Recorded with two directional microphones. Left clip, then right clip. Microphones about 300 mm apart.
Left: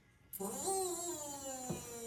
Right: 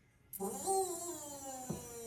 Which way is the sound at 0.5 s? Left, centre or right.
Centre.